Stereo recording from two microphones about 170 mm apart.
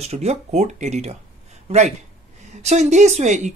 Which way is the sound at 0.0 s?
40° right (ahead or behind).